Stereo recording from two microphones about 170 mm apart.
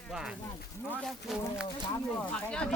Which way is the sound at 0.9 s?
Centre (ahead or behind).